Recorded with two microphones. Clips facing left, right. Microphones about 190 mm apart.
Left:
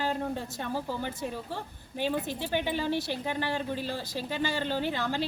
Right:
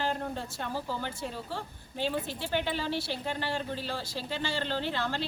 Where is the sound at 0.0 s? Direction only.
15° left (ahead or behind).